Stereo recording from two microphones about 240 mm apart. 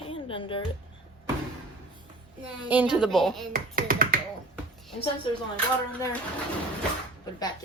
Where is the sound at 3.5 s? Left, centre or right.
Right.